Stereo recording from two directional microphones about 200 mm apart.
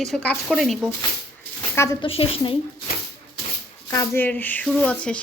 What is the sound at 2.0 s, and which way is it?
Speech, 30° left (ahead or behind).